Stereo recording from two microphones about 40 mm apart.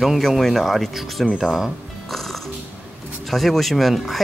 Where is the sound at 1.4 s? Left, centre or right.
Centre.